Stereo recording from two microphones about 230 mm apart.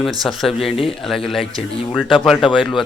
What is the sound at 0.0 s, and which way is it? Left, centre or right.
Speech, centre.